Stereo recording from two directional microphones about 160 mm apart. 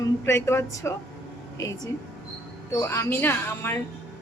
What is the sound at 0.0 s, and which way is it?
A woman's voice, 15° left (ahead or behind).